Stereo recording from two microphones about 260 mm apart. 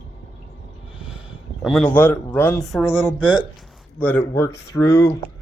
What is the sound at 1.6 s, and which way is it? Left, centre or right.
Speech, centre.